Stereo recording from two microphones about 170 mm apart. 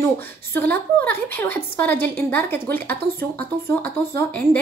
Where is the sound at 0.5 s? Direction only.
10° left (ahead or behind).